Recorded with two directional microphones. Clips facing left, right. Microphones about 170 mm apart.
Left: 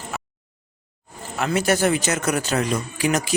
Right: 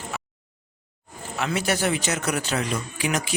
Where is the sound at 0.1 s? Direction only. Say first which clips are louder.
Left 4 dB; 45° left (ahead or behind).